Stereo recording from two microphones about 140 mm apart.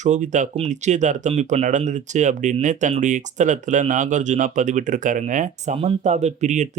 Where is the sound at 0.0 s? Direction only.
60° right (ahead or behind).